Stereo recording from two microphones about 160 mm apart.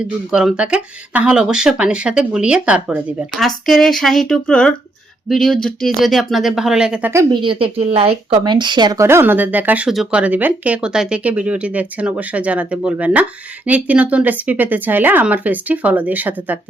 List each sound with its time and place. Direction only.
0.3 s speech: 5° right (ahead or behind)
7.1 s a woman's voice: 20° right (ahead or behind)
7.4 s a woman's voice: 35° right (ahead or behind); by 16.6 s 10° right (ahead or behind)